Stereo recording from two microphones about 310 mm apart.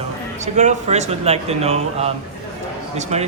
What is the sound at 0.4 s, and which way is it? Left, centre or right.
Speech, right.